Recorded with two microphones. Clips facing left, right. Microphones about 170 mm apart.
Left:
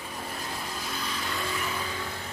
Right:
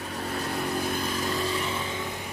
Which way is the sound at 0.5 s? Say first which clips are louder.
Right 8 dB; 60° right (ahead or behind).